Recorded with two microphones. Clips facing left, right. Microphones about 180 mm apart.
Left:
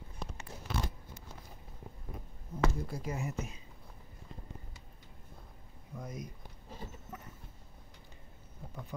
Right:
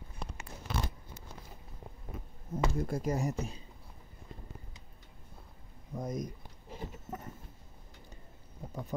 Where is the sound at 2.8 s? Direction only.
50° right (ahead or behind); by 3.6 s 35° right (ahead or behind).